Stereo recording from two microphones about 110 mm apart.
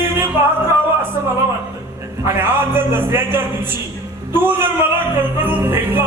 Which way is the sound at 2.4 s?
20° right (ahead or behind).